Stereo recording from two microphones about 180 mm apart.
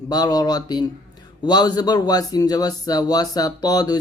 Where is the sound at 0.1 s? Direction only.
20° left (ahead or behind).